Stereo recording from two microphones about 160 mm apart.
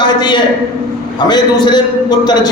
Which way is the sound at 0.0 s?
30° left (ahead or behind).